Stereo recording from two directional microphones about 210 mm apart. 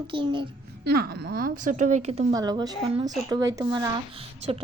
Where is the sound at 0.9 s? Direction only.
50° right (ahead or behind); by 2.2 s 30° right (ahead or behind).